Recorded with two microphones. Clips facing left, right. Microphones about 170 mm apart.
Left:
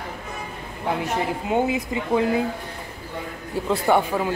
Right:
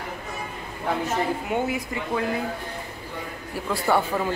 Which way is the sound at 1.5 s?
20° left (ahead or behind).